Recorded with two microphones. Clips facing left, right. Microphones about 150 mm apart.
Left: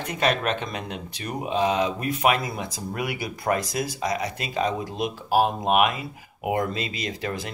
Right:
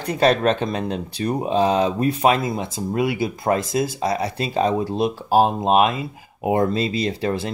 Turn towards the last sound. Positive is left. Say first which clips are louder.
# right 7 dB
turn(degrees=-30)  # may be behind; listen again after turning